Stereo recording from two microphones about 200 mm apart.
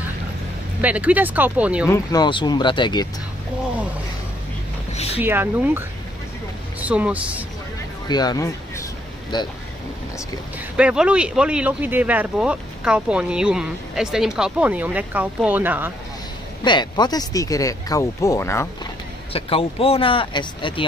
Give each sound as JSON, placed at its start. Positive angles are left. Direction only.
{"t": 0.7, "sound": "speech", "side_deg": -5}
{"t": 1.9, "sound": "speech", "side_deg": 20}
{"t": 4.9, "sound": "a sound", "side_deg": 30}
{"t": 5.2, "sound": "speech", "side_deg": -10}
{"t": 8.1, "sound": "speech", "side_deg": 20}
{"t": 10.8, "sound": "speech", "side_deg": -5}
{"t": 16.6, "sound": "speech", "side_deg": 20}
{"t": 19.3, "sound": "speech", "side_deg": 30}